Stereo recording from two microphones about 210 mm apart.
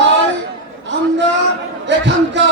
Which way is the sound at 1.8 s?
55° right (ahead or behind).